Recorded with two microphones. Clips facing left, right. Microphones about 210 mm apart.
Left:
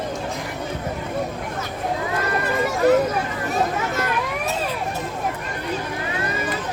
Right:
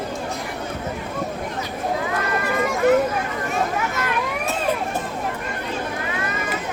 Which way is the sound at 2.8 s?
35° left (ahead or behind).